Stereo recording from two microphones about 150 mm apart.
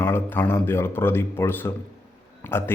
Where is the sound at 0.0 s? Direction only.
15° left (ahead or behind).